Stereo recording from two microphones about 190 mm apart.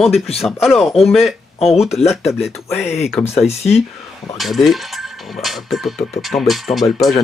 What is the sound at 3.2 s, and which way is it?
Speech, 35° left (ahead or behind).